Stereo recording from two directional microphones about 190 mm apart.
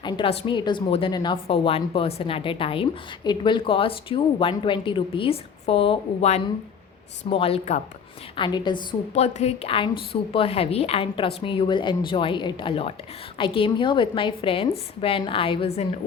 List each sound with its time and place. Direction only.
0.0 s a woman's voice: 25° left (ahead or behind)
8.4 s a woman's voice: 25° left (ahead or behind)